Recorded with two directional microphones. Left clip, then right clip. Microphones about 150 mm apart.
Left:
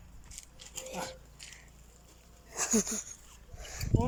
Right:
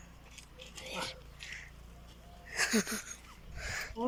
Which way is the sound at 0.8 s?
20° left (ahead or behind).